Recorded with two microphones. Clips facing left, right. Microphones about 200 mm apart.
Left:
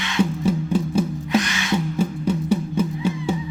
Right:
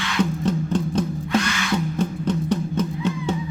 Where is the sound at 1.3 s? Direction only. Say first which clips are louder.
Left 1 dB; 20° left (ahead or behind).